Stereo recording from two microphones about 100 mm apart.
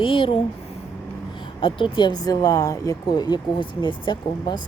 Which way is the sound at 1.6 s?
55° left (ahead or behind).